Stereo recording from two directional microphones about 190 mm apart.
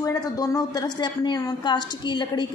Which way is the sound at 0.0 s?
20° left (ahead or behind).